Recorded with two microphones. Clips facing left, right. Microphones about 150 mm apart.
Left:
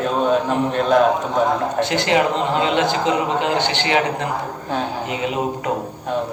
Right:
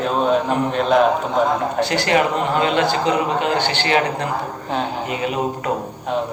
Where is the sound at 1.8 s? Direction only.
20° left (ahead or behind).